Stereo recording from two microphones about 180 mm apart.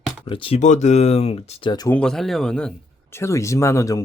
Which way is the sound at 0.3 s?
30° left (ahead or behind).